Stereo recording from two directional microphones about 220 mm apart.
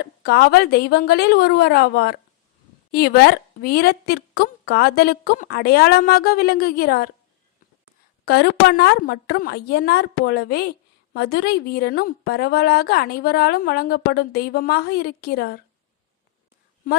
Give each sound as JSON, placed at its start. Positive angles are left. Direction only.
{"t": 0.0, "sound": "a woman's voice", "side_deg": 45}
{"t": 8.2, "sound": "a woman's voice", "side_deg": 45}